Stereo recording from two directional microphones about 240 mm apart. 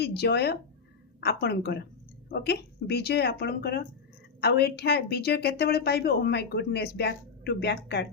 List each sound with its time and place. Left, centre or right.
0.0 s a woman's voice: left